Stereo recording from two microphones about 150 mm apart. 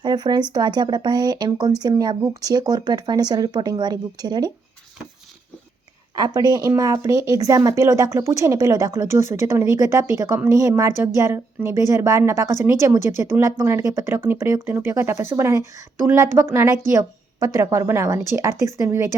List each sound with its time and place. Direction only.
0.0 s speech: 30° right (ahead or behind)
6.1 s speech: 25° right (ahead or behind)